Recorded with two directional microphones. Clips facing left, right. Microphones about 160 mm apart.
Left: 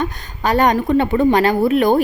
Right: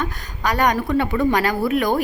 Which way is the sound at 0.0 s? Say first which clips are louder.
Left 4 dB; 25° left (ahead or behind).